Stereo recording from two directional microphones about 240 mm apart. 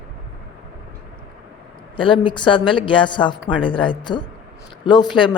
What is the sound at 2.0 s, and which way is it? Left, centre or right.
Speech, left.